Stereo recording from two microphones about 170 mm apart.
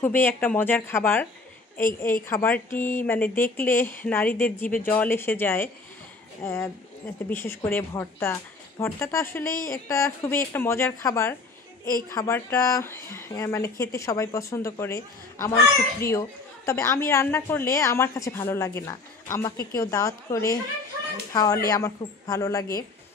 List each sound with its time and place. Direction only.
0.0 s a child's voice: 10° left (ahead or behind)
2.2 s a child's voice: 10° left (ahead or behind)